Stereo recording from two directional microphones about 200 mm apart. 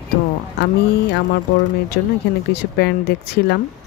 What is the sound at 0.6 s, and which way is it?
Speech, 55° left (ahead or behind).